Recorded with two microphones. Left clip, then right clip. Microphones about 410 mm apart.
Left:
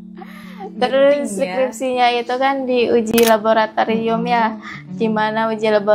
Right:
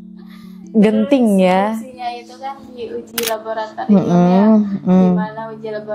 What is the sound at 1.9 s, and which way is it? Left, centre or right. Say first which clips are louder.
Speech: left 11 dB; left.